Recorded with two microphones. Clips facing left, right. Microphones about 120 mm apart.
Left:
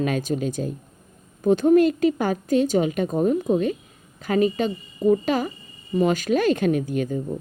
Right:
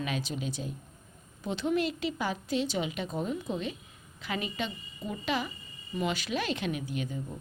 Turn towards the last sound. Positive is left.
turn(degrees=45)  # may be behind; listen again after turning